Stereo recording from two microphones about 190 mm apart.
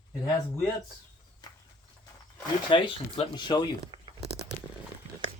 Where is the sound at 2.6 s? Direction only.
25° left (ahead or behind).